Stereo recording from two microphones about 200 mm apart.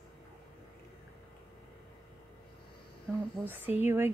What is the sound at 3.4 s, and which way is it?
Speech, 10° right (ahead or behind).